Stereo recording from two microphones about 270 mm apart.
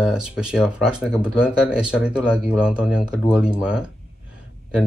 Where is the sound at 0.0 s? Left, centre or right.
Centre.